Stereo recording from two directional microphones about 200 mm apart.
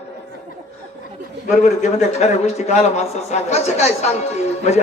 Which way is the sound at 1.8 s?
35° left (ahead or behind).